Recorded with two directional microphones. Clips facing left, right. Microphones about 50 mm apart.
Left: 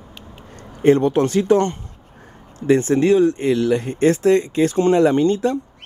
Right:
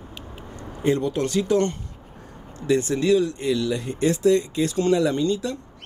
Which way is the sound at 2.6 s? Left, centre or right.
Left.